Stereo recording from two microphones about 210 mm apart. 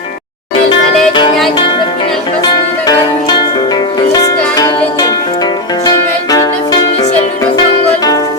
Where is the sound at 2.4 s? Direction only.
20° left (ahead or behind).